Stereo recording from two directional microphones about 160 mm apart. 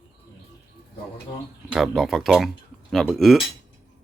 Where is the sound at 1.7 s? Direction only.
Centre (ahead or behind).